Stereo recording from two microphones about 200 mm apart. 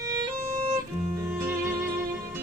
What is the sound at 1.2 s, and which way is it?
Music, 10° right (ahead or behind).